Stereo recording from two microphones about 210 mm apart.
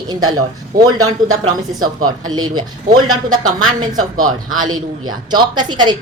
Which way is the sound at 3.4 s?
80° right.